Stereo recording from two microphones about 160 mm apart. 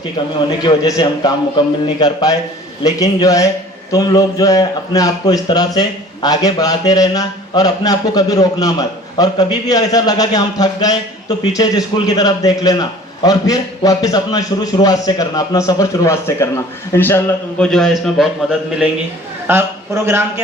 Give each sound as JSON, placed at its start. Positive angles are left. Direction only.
{"t": 0.6, "sound": "a man's voice", "side_deg": 25}
{"t": 17.7, "sound": "a man's voice", "side_deg": 0}
{"t": 19.5, "sound": "speech", "side_deg": -15}